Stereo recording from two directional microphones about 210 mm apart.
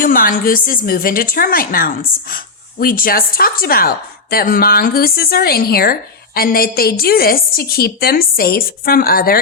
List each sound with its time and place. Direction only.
0.0 s a woman's voice: 40° left (ahead or behind)